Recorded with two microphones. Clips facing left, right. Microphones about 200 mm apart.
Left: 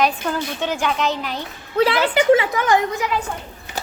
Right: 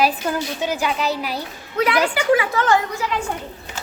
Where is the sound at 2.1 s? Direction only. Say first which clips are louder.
Left 3 dB; 25° left (ahead or behind).